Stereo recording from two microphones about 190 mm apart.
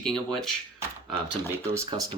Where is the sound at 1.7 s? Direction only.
20° right (ahead or behind).